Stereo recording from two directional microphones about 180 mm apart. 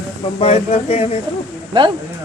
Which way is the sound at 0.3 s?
35° left (ahead or behind).